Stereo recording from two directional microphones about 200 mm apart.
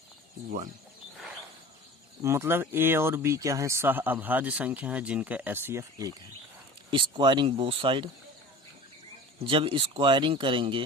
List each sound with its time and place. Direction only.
2.2 s speech: 15° right (ahead or behind)
9.5 s speech: 25° right (ahead or behind)